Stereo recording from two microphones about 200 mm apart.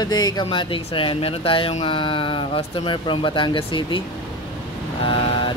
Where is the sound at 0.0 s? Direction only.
20° left (ahead or behind).